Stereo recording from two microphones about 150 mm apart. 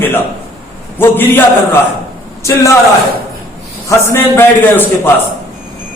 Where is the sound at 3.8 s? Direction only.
20° left (ahead or behind).